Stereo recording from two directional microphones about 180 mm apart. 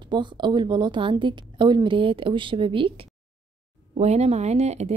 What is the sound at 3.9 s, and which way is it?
Speech, 35° right (ahead or behind).